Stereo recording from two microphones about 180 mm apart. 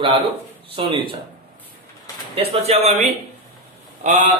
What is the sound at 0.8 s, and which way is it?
Speech, 25° right (ahead or behind).